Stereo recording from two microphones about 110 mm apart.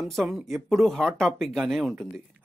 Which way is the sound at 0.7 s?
Centre (ahead or behind).